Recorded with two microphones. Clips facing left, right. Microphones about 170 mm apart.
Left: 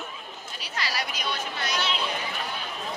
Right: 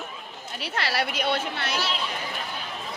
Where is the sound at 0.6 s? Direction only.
65° right (ahead or behind).